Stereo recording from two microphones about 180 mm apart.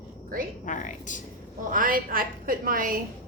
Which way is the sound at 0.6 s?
45° left (ahead or behind).